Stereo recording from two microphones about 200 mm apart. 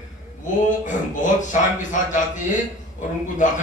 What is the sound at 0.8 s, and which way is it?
A man's voice, 40° left (ahead or behind).